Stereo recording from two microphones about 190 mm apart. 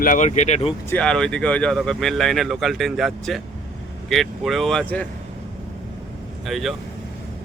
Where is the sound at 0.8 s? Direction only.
5° left (ahead or behind).